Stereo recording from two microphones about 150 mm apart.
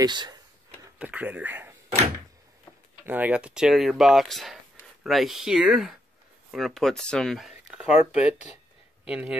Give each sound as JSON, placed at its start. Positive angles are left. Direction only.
{"t": 0.0, "sound": "speech", "side_deg": -30}
{"t": 0.9, "sound": "speech", "side_deg": -10}
{"t": 3.1, "sound": "speech", "side_deg": -10}